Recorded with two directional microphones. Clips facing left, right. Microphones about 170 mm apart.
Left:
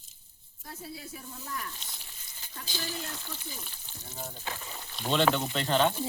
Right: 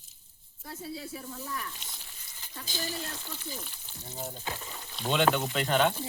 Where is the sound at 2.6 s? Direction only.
45° right (ahead or behind).